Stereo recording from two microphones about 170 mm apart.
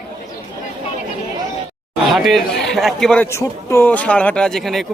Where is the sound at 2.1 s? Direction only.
Centre (ahead or behind).